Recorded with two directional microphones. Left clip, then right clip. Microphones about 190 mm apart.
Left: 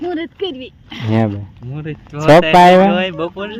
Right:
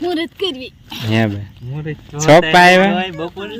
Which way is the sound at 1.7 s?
40° left (ahead or behind).